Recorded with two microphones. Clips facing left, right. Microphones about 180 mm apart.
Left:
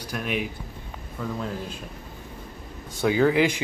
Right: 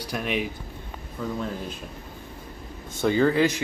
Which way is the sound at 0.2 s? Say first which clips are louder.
Even; centre (ahead or behind).